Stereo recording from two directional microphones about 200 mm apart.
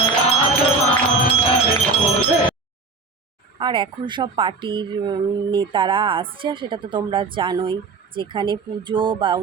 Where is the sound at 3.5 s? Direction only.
25° right (ahead or behind).